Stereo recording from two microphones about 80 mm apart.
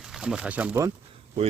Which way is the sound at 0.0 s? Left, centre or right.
Centre.